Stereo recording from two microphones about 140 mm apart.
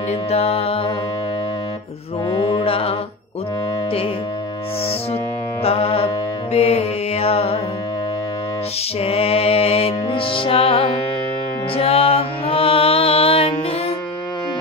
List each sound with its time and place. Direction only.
0.3 s music: 45° left (ahead or behind)
2.3 s mantra: 40° left (ahead or behind)
5.6 s music: 45° left (ahead or behind)
9.0 s music: 45° left (ahead or behind)